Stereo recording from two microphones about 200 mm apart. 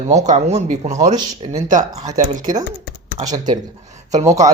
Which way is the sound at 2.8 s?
55° left (ahead or behind).